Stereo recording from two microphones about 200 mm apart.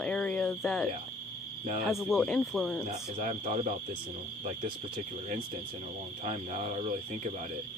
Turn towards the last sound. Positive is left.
turn(degrees=-35)  # may be behind; listen again after turning